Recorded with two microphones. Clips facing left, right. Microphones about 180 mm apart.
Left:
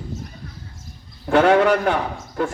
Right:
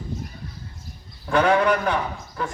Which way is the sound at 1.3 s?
45° left (ahead or behind).